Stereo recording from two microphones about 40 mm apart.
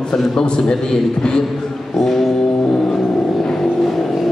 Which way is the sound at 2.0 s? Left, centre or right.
Centre.